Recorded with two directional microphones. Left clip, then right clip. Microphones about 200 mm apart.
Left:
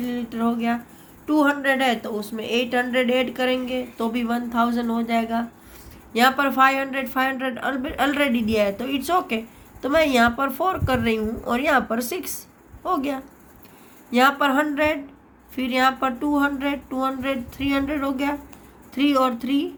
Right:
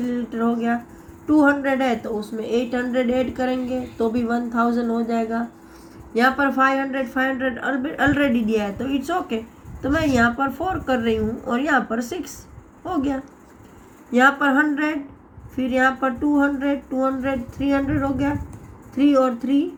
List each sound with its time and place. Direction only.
0.1 s a woman's voice: 50° left (ahead or behind)